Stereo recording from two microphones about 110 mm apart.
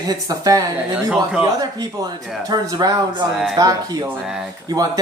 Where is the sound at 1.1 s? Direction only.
10° right (ahead or behind).